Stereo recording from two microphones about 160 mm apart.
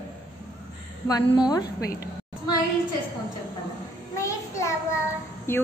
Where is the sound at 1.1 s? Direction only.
25° left (ahead or behind).